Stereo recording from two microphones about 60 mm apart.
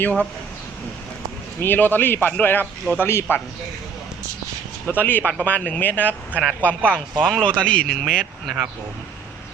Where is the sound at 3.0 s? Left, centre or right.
Left.